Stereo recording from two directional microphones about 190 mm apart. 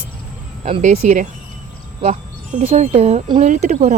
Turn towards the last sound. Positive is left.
turn(degrees=-35)  # may be behind; listen again after turning